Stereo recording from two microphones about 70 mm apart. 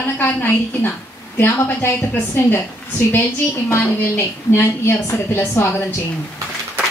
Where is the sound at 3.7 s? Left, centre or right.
Left.